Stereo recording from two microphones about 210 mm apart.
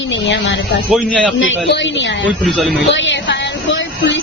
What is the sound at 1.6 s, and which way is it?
Speech, 55° left (ahead or behind).